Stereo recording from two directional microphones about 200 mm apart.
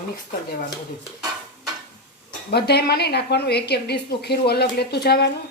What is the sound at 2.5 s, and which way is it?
A woman's voice, 55° left (ahead or behind).